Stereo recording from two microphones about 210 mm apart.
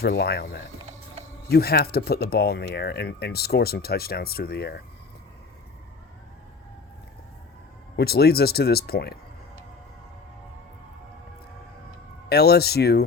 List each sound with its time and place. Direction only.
0.0 s speech: 50° left (ahead or behind)
7.9 s speech: 50° left (ahead or behind)
12.3 s speech: 50° left (ahead or behind)